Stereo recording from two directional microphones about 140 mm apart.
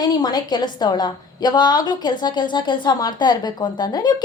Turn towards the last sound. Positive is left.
turn(degrees=30)  # may be behind; listen again after turning